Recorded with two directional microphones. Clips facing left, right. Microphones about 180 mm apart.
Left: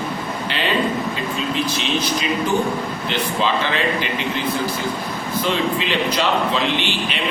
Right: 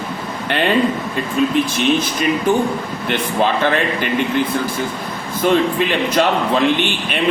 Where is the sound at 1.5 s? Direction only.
50° right (ahead or behind).